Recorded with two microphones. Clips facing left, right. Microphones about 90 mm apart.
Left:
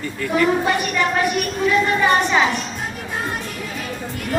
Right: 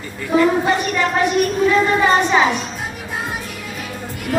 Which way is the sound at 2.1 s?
20° right (ahead or behind).